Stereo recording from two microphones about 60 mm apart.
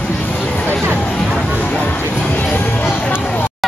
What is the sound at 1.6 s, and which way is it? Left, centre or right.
Music, left.